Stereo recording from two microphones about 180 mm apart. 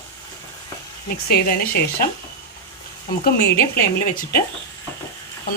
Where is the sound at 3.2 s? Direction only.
60° left (ahead or behind).